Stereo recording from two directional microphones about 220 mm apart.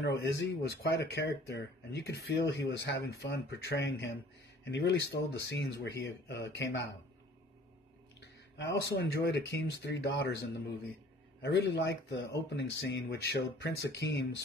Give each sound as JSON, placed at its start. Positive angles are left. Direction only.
{"t": 0.0, "sound": "speech", "side_deg": 50}
{"t": 8.5, "sound": "speech", "side_deg": 50}
{"t": 11.4, "sound": "speech", "side_deg": 50}